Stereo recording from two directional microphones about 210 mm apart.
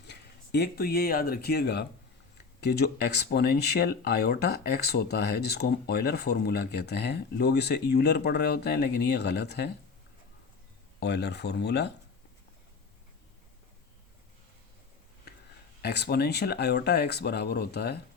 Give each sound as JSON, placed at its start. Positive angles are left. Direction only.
{"t": 0.0, "sound": "speech", "side_deg": 50}
{"t": 5.5, "sound": "speech", "side_deg": 50}
{"t": 11.0, "sound": "speech", "side_deg": 50}
{"t": 15.8, "sound": "speech", "side_deg": 50}